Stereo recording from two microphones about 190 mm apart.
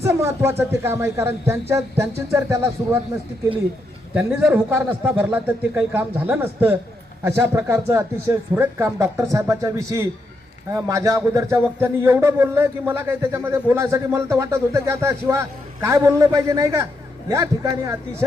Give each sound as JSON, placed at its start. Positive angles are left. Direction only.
{"t": 0.0, "sound": "a man's voice", "side_deg": -15}
{"t": 4.1, "sound": "a man's voice", "side_deg": -10}